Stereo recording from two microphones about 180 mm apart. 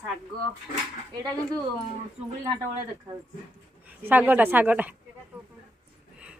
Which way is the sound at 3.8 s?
10° right (ahead or behind).